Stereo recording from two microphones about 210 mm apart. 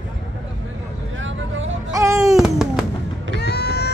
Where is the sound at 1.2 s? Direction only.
65° right (ahead or behind).